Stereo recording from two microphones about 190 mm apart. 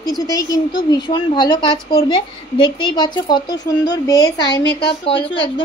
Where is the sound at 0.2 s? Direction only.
20° left (ahead or behind).